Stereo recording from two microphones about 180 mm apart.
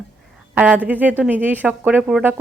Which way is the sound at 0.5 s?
10° right (ahead or behind).